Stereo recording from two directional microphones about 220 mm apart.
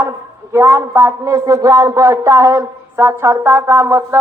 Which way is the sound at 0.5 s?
10° right (ahead or behind).